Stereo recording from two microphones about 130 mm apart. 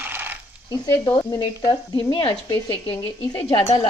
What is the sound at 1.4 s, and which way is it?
Speech, 30° left (ahead or behind).